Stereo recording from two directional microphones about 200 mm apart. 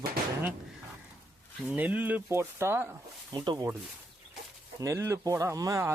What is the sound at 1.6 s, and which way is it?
Speech, 5° right (ahead or behind).